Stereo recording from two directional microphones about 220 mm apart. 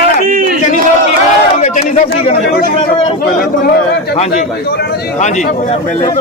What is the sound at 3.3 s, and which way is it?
A man's voice, 40° left (ahead or behind).